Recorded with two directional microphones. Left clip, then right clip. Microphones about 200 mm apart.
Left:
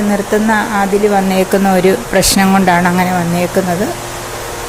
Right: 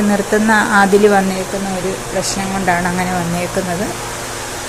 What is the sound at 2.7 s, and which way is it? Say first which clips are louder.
Speech: left 5 dB; 20° left (ahead or behind).